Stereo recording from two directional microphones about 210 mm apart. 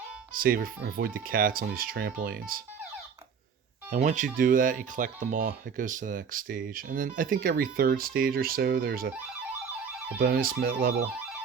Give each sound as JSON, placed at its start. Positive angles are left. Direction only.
{"t": 0.3, "sound": "speech", "side_deg": -45}
{"t": 3.9, "sound": "speech", "side_deg": -35}
{"t": 10.2, "sound": "speech", "side_deg": -45}